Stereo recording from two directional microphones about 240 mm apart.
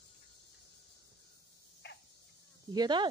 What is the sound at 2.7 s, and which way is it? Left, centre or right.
Speech, centre.